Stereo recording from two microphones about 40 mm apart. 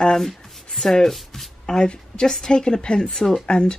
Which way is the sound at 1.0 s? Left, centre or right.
Centre.